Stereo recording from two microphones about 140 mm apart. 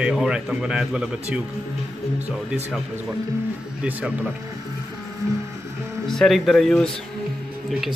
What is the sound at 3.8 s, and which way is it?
Speech, 10° right (ahead or behind).